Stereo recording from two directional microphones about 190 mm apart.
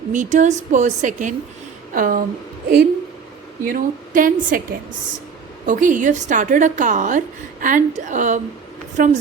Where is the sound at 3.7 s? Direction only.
45° right (ahead or behind).